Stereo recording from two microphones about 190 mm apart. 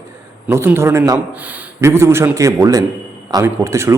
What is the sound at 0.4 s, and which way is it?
A man's voice, 10° right (ahead or behind).